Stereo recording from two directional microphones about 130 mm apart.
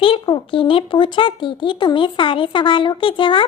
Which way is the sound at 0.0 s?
40° left (ahead or behind).